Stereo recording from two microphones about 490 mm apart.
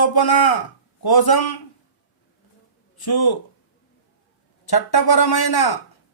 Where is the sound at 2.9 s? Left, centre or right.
Left.